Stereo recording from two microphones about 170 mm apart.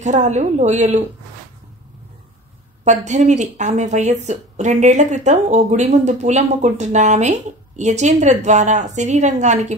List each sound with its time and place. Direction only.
0.0 s a woman's voice: 45° right (ahead or behind)
3.1 s a woman's voice: 45° right (ahead or behind)